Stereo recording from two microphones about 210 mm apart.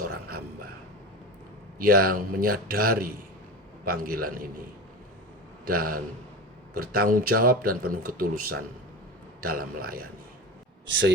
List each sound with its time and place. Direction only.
0.0 s a sound: 45° right (ahead or behind)
1.8 s speech: 45° right (ahead or behind)
5.6 s speech: 45° right (ahead or behind)